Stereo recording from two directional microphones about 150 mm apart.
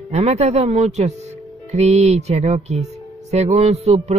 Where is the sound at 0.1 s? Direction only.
45° right (ahead or behind).